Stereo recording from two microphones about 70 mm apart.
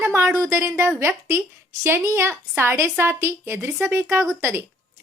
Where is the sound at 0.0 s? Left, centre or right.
Right.